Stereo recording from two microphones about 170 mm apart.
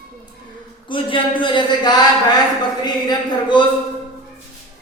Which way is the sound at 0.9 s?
30° left (ahead or behind).